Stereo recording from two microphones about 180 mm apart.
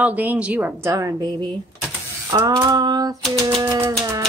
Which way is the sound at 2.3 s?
20° right (ahead or behind).